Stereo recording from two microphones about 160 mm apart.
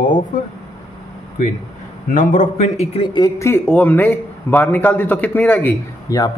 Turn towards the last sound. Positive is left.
turn(degrees=25)  # may be behind; listen again after turning